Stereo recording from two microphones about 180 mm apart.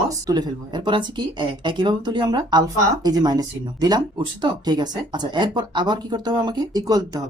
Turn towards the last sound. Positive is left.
turn(degrees=-20)  # may be behind; listen again after turning